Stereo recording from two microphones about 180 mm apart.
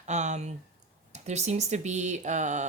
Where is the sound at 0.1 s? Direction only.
40° right (ahead or behind).